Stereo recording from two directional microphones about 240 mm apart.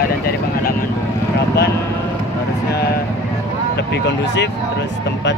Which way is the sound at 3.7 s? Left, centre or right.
Left.